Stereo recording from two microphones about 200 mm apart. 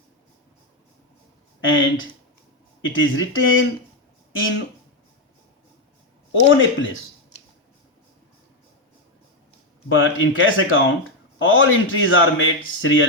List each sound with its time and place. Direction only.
1.6 s a man's voice: 70° left (ahead or behind)
6.4 s a man's voice: 70° left (ahead or behind)
9.9 s a man's voice: 75° left (ahead or behind)